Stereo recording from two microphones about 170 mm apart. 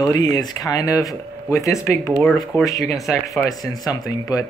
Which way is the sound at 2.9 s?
20° left (ahead or behind).